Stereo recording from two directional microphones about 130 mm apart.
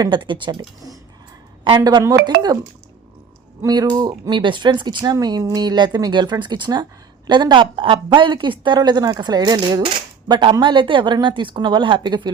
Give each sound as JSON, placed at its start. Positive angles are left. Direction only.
{"t": 0.0, "sound": "a woman's voice", "side_deg": -40}
{"t": 1.8, "sound": "a woman's voice", "side_deg": -30}
{"t": 3.7, "sound": "a woman's voice", "side_deg": -30}